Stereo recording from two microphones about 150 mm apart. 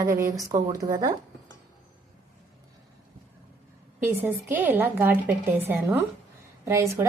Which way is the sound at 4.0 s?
15° right (ahead or behind).